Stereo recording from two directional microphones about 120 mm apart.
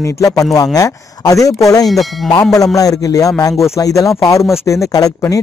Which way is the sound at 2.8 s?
30° left (ahead or behind).